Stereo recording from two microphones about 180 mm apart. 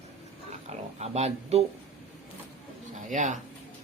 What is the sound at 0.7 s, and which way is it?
Speech, 35° right (ahead or behind).